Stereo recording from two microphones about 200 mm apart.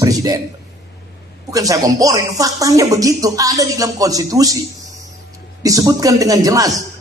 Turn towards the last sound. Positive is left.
turn(degrees=-15)  # may be behind; listen again after turning